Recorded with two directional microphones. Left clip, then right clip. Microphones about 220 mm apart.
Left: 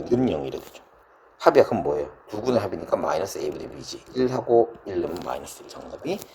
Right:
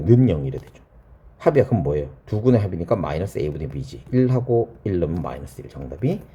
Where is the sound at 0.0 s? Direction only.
15° left (ahead or behind).